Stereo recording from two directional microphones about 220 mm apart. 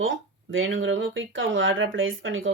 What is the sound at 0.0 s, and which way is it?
Speech, 60° right (ahead or behind).